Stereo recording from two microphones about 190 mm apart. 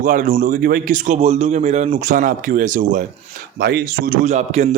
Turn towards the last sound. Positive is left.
turn(degrees=-40)  # may be behind; listen again after turning